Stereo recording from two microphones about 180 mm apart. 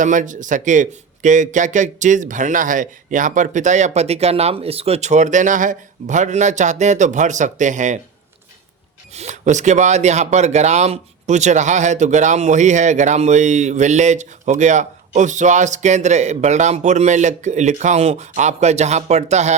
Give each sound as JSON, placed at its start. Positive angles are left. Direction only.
{"t": 0.0, "sound": "speech", "side_deg": -45}
{"t": 9.1, "sound": "speech", "side_deg": -40}